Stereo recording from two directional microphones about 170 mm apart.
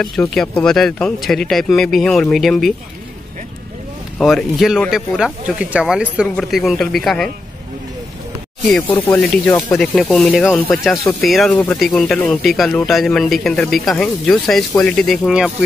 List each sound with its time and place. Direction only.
0.3 s a man's voice: 5° left (ahead or behind)
4.2 s a man's voice: centre (ahead or behind)
8.6 s a man's voice: 5° left (ahead or behind)